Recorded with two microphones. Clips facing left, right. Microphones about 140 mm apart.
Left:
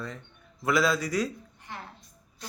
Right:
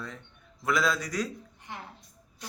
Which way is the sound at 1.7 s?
15° right (ahead or behind).